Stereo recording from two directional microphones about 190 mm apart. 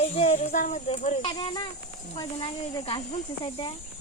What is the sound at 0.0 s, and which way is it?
Speech, 35° left (ahead or behind).